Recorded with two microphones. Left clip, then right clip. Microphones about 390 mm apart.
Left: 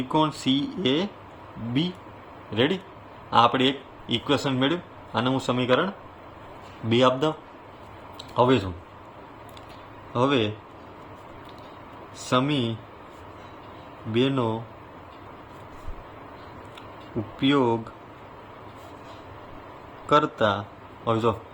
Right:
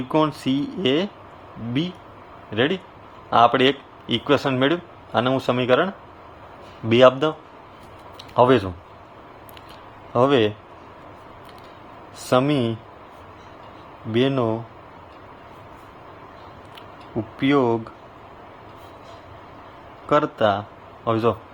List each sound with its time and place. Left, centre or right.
0.1 s speech: centre
2.6 s a man's voice: centre
8.4 s speech: centre
10.2 s speech: centre
12.3 s speech: centre
14.1 s speech: centre
17.4 s speech: centre
20.1 s a man's voice: centre